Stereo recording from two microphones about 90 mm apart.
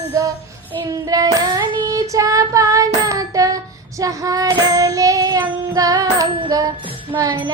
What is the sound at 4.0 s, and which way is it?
Female singing, 40° right (ahead or behind).